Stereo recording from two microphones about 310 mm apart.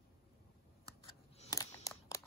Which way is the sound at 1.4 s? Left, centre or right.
Centre.